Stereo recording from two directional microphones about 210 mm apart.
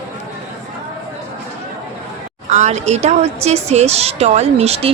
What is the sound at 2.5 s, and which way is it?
A woman's voice, 35° right (ahead or behind).